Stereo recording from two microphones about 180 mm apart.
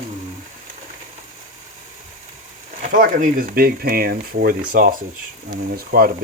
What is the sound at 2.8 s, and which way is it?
Speech, 50° right (ahead or behind).